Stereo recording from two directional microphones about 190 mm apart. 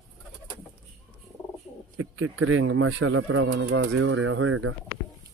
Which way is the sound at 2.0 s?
90° right.